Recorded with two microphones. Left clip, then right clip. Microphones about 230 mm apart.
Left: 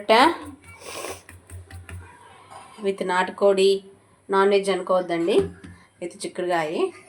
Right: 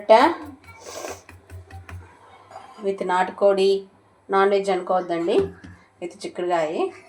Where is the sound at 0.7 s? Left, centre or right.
Left.